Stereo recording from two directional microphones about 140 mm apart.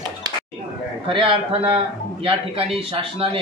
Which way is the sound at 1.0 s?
40° right (ahead or behind).